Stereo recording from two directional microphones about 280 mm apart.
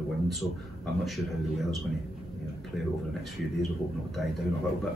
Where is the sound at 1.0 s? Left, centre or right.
Centre.